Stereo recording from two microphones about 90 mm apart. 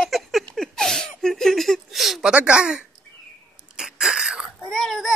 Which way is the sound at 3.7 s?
5° right (ahead or behind).